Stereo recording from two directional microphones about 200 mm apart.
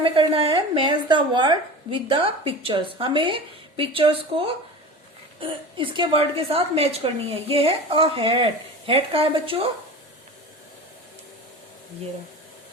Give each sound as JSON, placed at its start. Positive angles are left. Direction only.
{"t": 0.0, "sound": "a woman's voice", "side_deg": -30}